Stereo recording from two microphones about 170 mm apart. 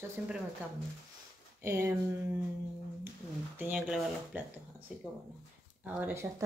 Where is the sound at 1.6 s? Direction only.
20° right (ahead or behind).